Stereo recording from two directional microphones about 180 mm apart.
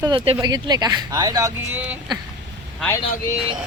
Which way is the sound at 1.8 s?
10° right (ahead or behind).